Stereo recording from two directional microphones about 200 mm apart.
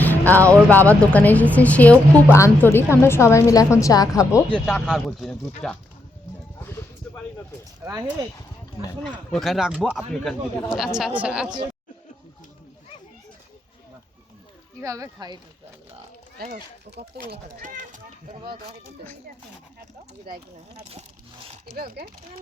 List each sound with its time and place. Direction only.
0.0 s music: 10° left (ahead or behind)
0.9 s a woman's voice: 5° left (ahead or behind)
4.5 s speech: centre (ahead or behind)
6.6 s a sound: 10° left (ahead or behind)
7.8 s speech: 15° right (ahead or behind)
9.3 s speech: centre (ahead or behind)
14.8 s speech: 15° right (ahead or behind)
17.3 s speech: 40° right (ahead or behind)
21.8 s speech: 50° right (ahead or behind)